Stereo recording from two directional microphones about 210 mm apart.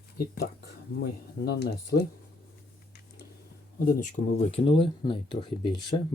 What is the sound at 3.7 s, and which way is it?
Speech, 35° left (ahead or behind).